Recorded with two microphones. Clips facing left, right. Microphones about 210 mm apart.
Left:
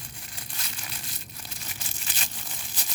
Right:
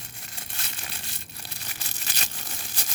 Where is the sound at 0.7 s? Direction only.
65° right (ahead or behind).